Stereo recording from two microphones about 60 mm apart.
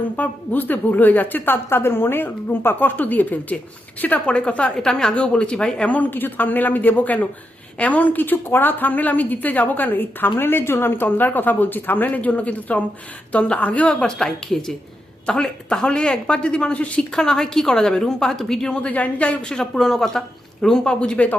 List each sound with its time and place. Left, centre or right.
0.2 s a woman's voice: left; by 5.8 s centre
5.8 s a woman's voice: left
17.2 s speech: centre
18.8 s speech: left